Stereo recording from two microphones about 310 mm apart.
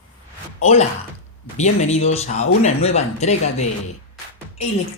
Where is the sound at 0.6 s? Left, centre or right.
Left.